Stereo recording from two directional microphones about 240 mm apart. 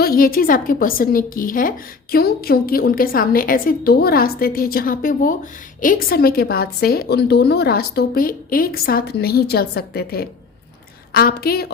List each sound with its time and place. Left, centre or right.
0.0 s a woman's voice: left